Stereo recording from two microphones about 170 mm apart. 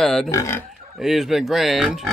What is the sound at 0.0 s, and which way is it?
Speech, 5° left (ahead or behind).